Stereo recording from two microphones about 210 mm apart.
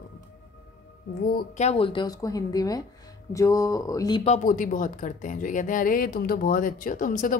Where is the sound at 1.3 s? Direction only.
45° left (ahead or behind).